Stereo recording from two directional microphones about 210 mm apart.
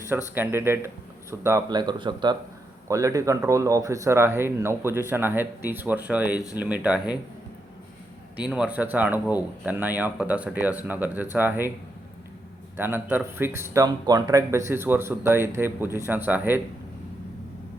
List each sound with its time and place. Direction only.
0.1 s speech: 10° right (ahead or behind)
6.3 s speech: 15° left (ahead or behind)
6.6 s speech: 5° right (ahead or behind)
8.4 s speech: 5° right (ahead or behind)
12.7 s speech: 10° right (ahead or behind)